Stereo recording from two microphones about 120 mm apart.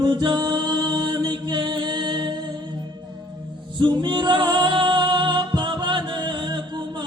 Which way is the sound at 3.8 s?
40° right (ahead or behind).